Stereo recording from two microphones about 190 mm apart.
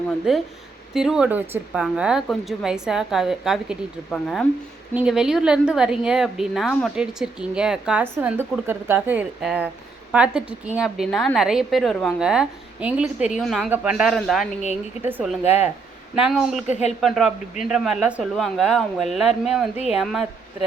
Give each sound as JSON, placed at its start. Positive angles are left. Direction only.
{"t": 0.3, "sound": "a woman's voice", "side_deg": 0}
{"t": 16.6, "sound": "speech", "side_deg": 40}
{"t": 17.0, "sound": "a woman's voice", "side_deg": 0}